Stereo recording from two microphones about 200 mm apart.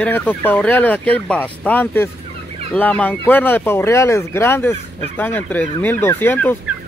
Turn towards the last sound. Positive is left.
turn(degrees=10)  # may be behind; listen again after turning